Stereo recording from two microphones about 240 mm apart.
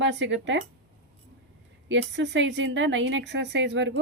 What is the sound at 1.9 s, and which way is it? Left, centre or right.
Speech, right.